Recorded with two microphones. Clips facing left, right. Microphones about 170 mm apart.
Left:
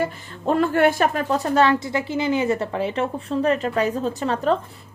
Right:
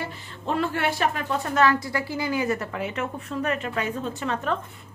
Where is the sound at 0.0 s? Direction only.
45° left (ahead or behind).